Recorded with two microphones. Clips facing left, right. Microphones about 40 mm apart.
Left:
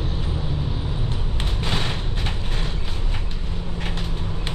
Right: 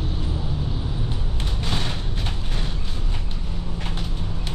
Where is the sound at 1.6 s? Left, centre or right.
Left.